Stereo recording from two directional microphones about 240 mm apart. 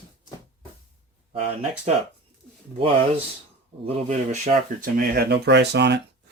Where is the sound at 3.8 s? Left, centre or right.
Right.